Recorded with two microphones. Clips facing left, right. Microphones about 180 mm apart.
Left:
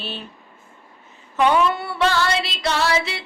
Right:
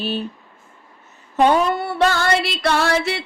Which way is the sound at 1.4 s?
40° right (ahead or behind).